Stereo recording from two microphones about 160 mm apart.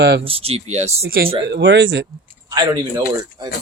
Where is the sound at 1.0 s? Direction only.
70° right (ahead or behind).